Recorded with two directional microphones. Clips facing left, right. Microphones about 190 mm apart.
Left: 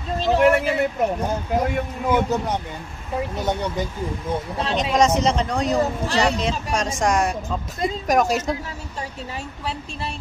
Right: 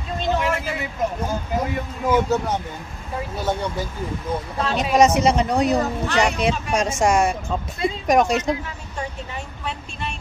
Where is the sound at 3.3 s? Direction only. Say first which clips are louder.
Right 2 dB; 15° left (ahead or behind).